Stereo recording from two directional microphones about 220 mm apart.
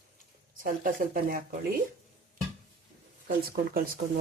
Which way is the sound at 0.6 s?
40° right (ahead or behind).